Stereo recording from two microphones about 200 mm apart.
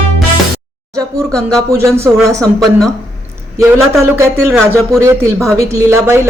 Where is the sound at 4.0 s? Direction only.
15° right (ahead or behind).